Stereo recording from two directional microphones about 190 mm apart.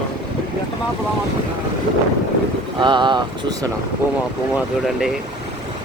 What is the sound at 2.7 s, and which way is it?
Speech, 25° right (ahead or behind).